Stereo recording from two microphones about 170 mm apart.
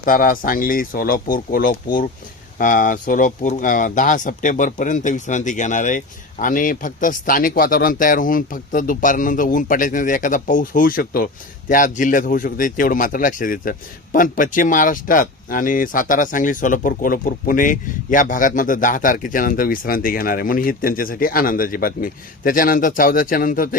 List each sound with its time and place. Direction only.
0.0 s a man's voice: 55° left (ahead or behind)